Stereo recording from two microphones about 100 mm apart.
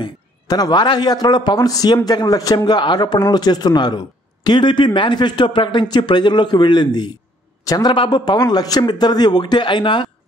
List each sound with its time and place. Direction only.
0.0 s a man's voice: 45° left (ahead or behind)